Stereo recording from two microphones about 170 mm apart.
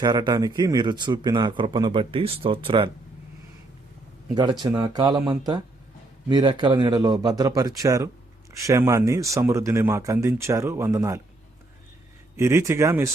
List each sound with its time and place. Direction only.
0.0 s speech: 25° right (ahead or behind)
4.6 s speech: 25° right (ahead or behind)
12.4 s speech: 15° right (ahead or behind)